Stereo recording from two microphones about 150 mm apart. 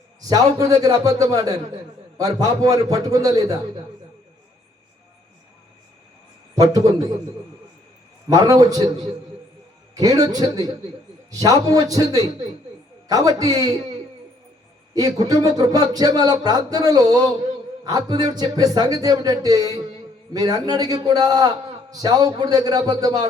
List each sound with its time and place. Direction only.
0.2 s a man's voice: 25° right (ahead or behind)
8.3 s a man's voice: 25° right (ahead or behind)
10.0 s a man's voice: 25° right (ahead or behind)
14.9 s a man's voice: 25° right (ahead or behind)